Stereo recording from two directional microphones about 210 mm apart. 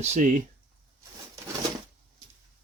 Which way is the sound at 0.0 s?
35° right (ahead or behind).